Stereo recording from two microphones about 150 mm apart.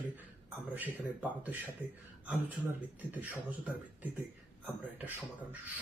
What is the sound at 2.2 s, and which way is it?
Speech, 5° right (ahead or behind).